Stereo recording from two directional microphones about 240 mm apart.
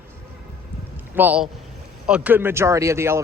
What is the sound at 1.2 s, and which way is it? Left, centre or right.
Speech, centre.